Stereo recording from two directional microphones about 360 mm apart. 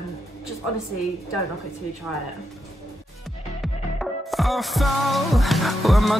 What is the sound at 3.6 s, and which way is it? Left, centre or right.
Music, centre.